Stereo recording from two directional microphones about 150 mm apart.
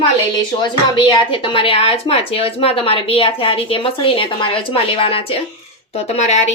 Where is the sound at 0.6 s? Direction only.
35° left (ahead or behind).